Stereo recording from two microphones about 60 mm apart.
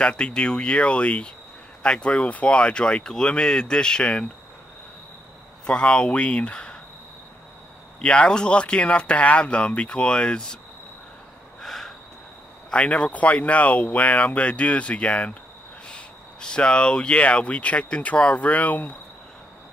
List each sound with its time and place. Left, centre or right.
0.0 s speech: centre
5.7 s speech: centre
8.0 s speech: centre
11.6 s a sound: centre
12.7 s speech: centre